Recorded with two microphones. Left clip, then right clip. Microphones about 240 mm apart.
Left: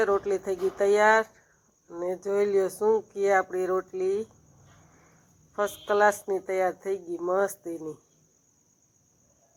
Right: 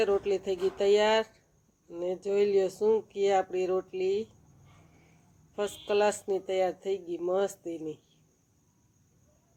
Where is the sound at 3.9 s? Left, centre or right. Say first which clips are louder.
Left 2 dB; centre.